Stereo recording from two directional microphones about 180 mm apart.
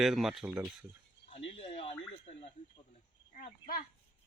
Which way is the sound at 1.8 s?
35° left (ahead or behind).